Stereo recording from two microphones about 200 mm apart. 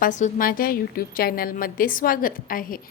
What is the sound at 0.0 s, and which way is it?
A woman's voice, 40° left (ahead or behind).